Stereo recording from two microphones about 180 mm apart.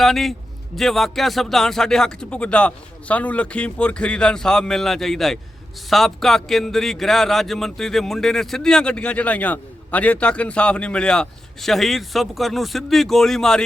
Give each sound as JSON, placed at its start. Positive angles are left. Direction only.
{"t": 0.0, "sound": "a man's voice", "side_deg": 0}